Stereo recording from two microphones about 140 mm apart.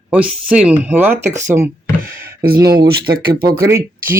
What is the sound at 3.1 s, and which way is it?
Speech, 90° right.